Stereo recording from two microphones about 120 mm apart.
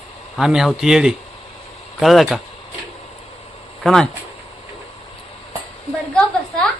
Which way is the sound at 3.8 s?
5° left (ahead or behind).